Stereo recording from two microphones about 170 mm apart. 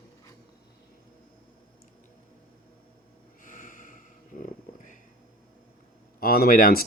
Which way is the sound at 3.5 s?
50° left (ahead or behind).